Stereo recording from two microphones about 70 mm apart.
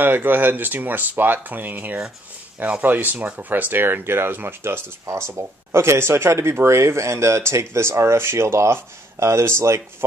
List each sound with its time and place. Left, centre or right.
0.0 s speech: right